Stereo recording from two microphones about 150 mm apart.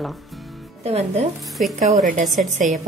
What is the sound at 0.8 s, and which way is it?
Speech, 45° right (ahead or behind).